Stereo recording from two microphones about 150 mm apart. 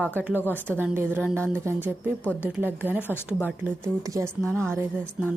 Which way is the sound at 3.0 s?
15° left (ahead or behind).